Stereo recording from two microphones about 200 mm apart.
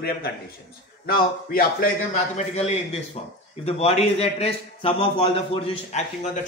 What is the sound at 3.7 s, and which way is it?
A man's voice, 30° left (ahead or behind).